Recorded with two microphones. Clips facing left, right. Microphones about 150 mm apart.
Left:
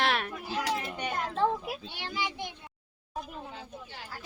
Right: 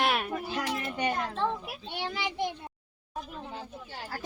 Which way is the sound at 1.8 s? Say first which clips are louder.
Right 2 dB; 60° right (ahead or behind).